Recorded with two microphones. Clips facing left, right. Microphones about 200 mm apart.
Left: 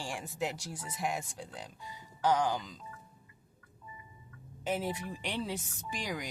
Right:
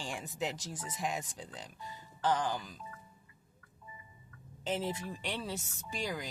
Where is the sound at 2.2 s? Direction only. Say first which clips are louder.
Left 3 dB; 15° left (ahead or behind).